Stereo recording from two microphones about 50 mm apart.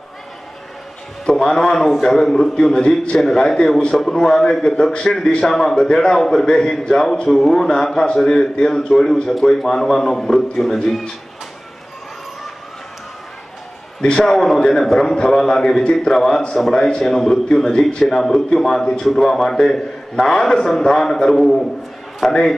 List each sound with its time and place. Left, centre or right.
1.2 s a man's voice: centre
14.0 s a man's voice: centre